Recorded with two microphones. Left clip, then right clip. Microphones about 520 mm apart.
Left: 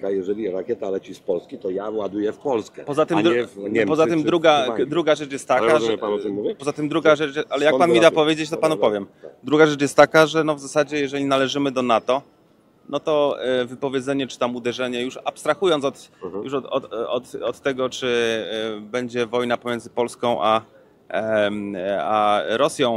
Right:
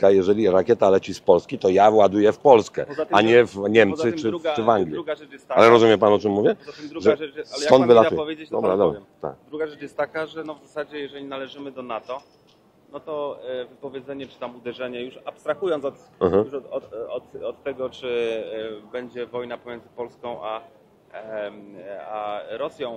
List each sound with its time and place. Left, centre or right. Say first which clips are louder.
0.0 s speech: right 7 dB; right
4.3 s a man's voice: even; left
5.6 s a man's voice: right 8 dB; right
6.6 s speech: left 3 dB; left